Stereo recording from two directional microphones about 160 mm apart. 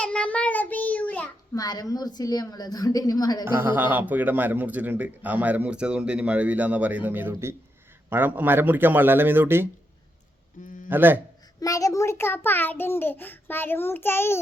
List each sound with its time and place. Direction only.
0.0 s child singing: 5° left (ahead or behind)
1.5 s a woman's voice: 25° left (ahead or behind)
3.4 s a man's voice: 15° right (ahead or behind)
10.8 s a man's voice: 10° right (ahead or behind)
11.6 s a child's voice: 20° left (ahead or behind)